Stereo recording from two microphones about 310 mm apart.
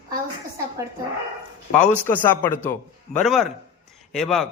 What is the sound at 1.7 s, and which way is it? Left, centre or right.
A man's voice, centre.